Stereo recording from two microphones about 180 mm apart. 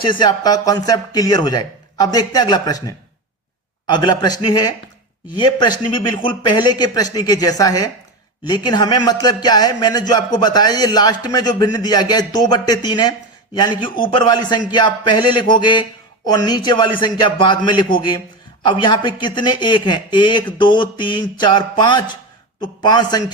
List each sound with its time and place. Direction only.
0.0 s speech: 25° left (ahead or behind)